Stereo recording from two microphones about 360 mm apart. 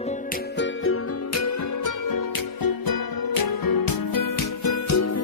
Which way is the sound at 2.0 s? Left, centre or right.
Left.